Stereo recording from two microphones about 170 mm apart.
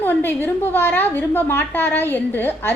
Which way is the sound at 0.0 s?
10° left (ahead or behind).